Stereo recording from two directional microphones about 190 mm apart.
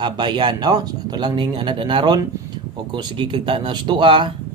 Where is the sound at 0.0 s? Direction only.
25° right (ahead or behind).